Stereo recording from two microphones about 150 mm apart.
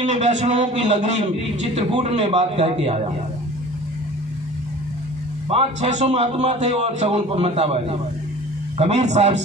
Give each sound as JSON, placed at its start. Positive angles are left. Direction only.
{"t": 0.0, "sound": "a man's voice", "side_deg": -50}
{"t": 5.5, "sound": "a man's voice", "side_deg": -45}